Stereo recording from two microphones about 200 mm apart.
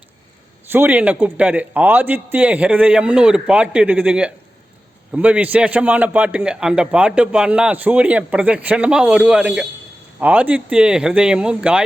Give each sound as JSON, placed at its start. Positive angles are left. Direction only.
{"t": 0.7, "sound": "a man's voice", "side_deg": -10}